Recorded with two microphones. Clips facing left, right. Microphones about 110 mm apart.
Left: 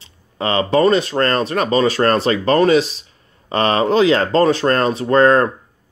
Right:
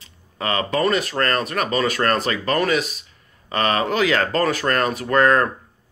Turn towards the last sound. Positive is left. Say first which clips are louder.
# left 4 dB
turn(degrees=30)  # may be behind; listen again after turning